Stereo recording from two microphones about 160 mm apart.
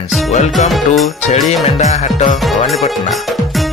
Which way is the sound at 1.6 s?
45° left (ahead or behind).